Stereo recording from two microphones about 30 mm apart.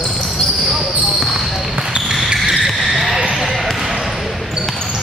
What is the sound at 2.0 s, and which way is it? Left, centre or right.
Basketball bounce, centre.